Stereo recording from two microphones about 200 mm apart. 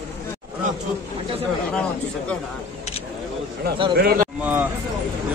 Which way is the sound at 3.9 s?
50° right (ahead or behind).